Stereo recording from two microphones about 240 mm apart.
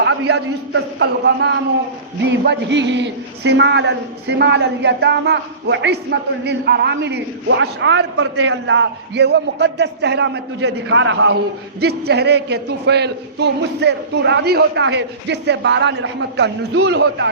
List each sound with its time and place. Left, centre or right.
0.0 s a man's voice: right